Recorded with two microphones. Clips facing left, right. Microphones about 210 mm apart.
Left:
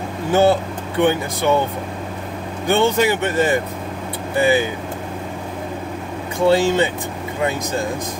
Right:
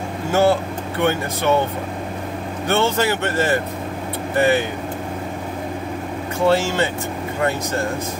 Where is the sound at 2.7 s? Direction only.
15° left (ahead or behind).